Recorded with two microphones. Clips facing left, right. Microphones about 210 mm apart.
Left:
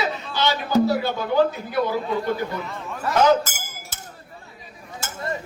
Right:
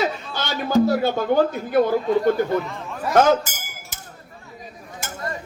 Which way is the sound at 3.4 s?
15° right (ahead or behind).